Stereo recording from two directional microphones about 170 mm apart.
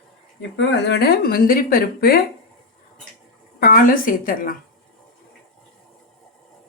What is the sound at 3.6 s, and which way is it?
Speech, 55° left (ahead or behind).